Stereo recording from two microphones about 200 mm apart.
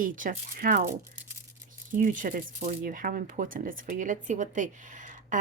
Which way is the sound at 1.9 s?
40° right (ahead or behind).